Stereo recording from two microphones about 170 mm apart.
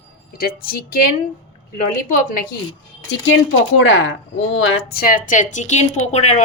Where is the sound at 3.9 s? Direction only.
90° left; by 6.4 s 45° left (ahead or behind).